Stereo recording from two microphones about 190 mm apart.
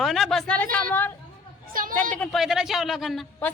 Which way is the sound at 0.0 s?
Centre (ahead or behind).